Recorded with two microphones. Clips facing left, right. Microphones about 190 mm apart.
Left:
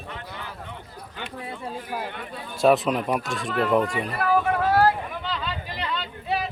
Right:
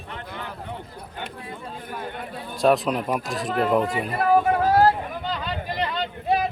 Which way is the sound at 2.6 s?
Centre (ahead or behind).